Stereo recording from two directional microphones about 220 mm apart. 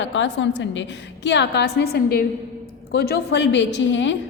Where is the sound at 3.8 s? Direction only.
55° left (ahead or behind).